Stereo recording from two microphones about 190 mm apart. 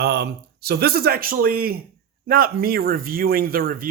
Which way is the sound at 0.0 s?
60° right (ahead or behind).